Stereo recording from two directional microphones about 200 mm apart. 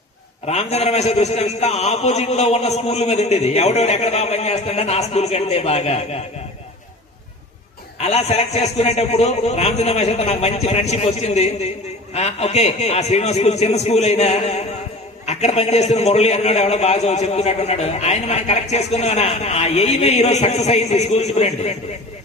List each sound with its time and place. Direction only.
0.4 s a man's voice: 30° left (ahead or behind)
7.9 s a man's voice: 30° left (ahead or behind)